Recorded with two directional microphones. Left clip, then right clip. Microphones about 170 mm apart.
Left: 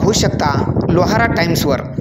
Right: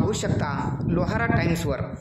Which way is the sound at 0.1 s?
40° left (ahead or behind).